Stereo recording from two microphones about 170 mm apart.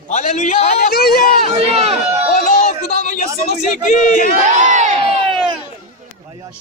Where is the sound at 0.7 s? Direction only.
65° left (ahead or behind).